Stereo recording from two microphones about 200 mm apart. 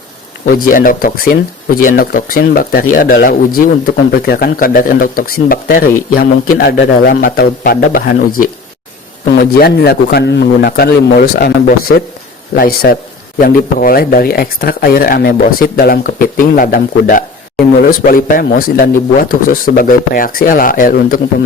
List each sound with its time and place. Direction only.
0.4 s speech: 45° left (ahead or behind)
9.3 s speech: 50° left (ahead or behind)